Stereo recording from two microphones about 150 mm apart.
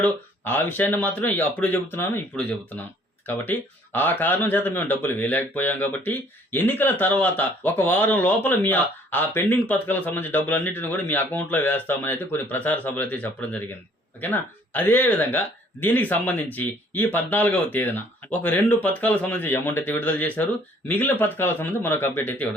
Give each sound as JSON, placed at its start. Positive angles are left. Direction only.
{"t": 0.0, "sound": "speech", "side_deg": 15}